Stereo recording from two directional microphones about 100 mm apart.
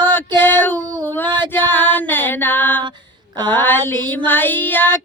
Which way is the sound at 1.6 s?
20° left (ahead or behind).